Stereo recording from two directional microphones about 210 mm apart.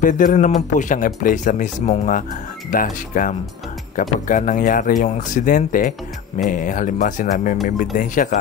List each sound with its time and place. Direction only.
0.0 s speech: 40° left (ahead or behind)